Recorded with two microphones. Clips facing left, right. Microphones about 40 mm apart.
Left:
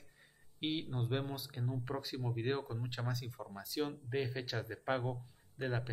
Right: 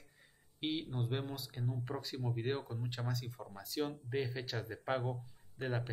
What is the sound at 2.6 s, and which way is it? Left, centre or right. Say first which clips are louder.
Speech: left 2 dB; left.